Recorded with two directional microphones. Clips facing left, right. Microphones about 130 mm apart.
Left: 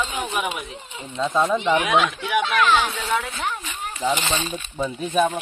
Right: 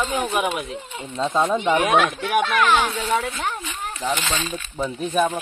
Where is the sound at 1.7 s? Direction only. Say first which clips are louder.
Right 2 dB; 50° right (ahead or behind).